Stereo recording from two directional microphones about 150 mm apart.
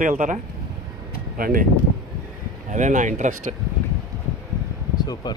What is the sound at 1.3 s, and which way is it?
Speech, 75° right (ahead or behind).